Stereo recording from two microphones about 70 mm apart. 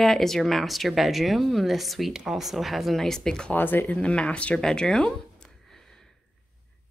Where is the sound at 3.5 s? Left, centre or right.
Left.